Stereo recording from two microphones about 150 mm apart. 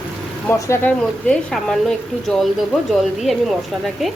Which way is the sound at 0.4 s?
10° left (ahead or behind).